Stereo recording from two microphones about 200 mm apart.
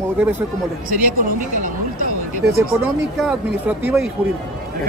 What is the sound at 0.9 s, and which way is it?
Speech, 45° right (ahead or behind).